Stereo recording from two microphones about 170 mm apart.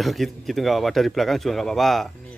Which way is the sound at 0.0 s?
Centre (ahead or behind).